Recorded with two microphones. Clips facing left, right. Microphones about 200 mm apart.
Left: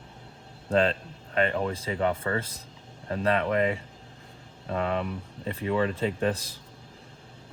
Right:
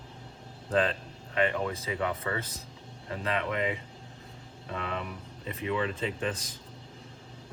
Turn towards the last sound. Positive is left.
turn(degrees=35)  # may be behind; listen again after turning